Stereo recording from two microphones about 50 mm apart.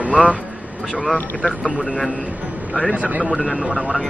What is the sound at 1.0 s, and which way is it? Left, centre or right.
Speech, left.